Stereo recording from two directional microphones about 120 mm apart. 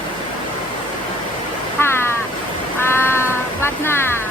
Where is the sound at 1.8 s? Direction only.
20° left (ahead or behind).